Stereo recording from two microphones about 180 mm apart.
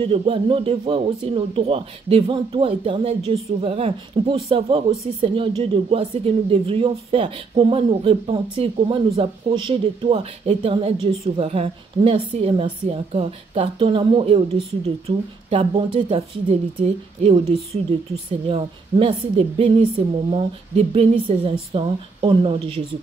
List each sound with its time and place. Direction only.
0.0 s speech: 30° right (ahead or behind)
18.5 s speech: 30° right (ahead or behind)